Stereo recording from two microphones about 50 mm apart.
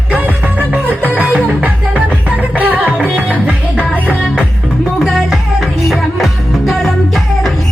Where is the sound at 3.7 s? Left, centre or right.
Left.